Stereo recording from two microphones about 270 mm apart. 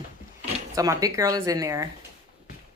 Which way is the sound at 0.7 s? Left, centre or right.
Centre.